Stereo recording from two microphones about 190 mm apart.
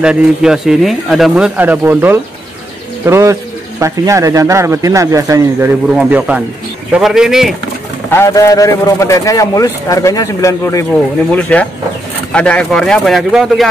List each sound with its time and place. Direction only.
0.0 s speech: 5° right (ahead or behind)
8.1 s a man's voice: 15° left (ahead or behind); by 13.7 s centre (ahead or behind)